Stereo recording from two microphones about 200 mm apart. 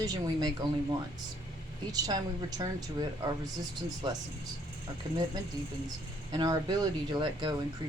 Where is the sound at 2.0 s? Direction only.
20° right (ahead or behind).